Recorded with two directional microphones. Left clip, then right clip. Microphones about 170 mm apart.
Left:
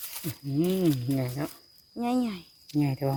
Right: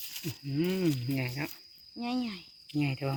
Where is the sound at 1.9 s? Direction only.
65° left (ahead or behind).